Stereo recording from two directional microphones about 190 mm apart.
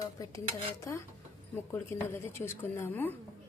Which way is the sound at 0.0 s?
15° left (ahead or behind).